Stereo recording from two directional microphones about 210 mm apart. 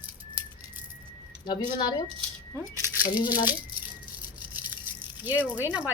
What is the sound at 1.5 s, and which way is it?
Speech, 20° left (ahead or behind).